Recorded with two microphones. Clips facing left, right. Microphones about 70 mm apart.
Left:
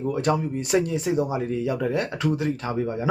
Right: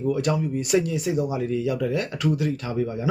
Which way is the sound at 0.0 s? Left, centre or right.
Left.